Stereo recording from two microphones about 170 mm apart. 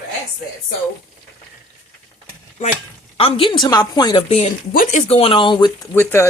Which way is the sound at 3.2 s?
30° left (ahead or behind).